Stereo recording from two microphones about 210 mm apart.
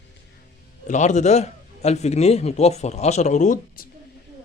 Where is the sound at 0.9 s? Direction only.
35° left (ahead or behind).